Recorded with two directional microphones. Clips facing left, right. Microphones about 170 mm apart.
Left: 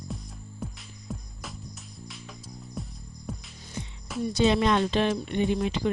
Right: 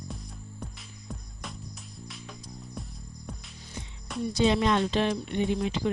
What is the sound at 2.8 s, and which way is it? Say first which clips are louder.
Music: left 2 dB; centre (ahead or behind).